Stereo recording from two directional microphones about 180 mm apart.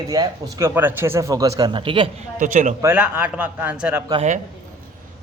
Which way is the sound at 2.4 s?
45° right (ahead or behind).